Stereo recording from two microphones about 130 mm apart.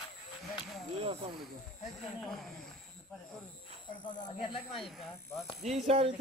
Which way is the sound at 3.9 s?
35° left (ahead or behind).